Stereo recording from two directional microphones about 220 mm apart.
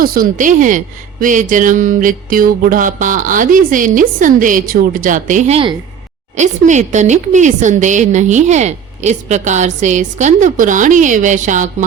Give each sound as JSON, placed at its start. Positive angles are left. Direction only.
{"t": 0.0, "sound": "speech", "side_deg": -40}